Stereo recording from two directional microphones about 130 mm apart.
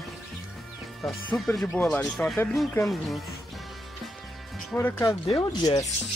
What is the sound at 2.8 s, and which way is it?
Speech, centre (ahead or behind).